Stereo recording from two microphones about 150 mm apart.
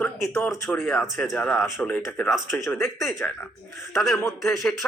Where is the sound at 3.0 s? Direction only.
Centre (ahead or behind).